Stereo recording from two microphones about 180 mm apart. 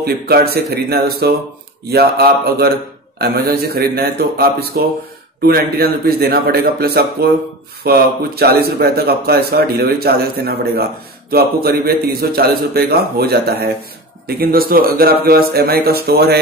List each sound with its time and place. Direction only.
0.0 s speech: 60° right (ahead or behind)